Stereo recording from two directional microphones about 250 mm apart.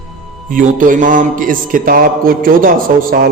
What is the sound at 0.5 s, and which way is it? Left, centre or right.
Mantra, right.